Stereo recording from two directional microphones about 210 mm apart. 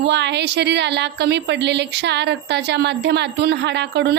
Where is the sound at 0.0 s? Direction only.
55° right (ahead or behind).